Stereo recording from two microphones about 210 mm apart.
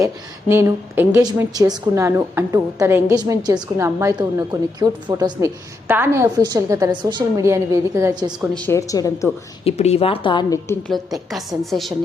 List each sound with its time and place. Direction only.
0.0 s a woman's voice: 10° right (ahead or behind)
8.4 s speech: 5° left (ahead or behind)
9.6 s a woman's voice: 30° left (ahead or behind)
11.1 s a woman's voice: centre (ahead or behind)